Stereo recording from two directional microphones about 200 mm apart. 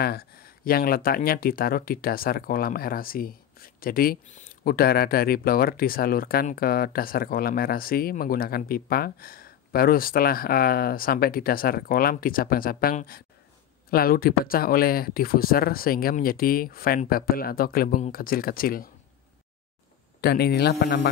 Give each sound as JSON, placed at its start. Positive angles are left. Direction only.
{"t": 0.0, "sound": "speech", "side_deg": 50}
{"t": 20.2, "sound": "speech", "side_deg": 55}